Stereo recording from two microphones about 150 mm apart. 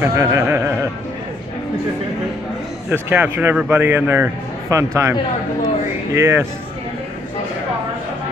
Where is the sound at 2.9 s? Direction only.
15° right (ahead or behind).